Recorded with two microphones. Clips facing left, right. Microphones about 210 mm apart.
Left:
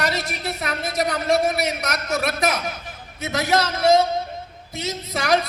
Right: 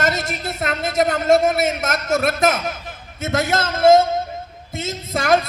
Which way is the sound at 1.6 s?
45° right (ahead or behind).